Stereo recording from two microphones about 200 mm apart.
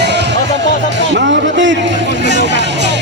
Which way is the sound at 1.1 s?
65° right (ahead or behind).